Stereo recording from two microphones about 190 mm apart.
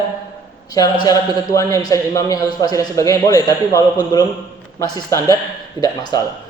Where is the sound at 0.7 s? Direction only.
20° left (ahead or behind).